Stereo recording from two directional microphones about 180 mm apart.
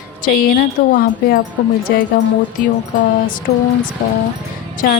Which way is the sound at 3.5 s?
40° left (ahead or behind).